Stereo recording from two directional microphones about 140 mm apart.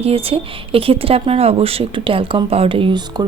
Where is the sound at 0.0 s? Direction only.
45° right (ahead or behind).